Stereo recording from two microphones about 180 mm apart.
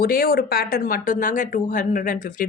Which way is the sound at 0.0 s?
55° left (ahead or behind).